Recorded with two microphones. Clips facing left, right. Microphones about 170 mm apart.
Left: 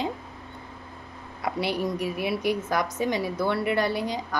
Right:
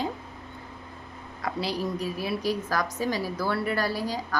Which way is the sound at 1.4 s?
25° left (ahead or behind).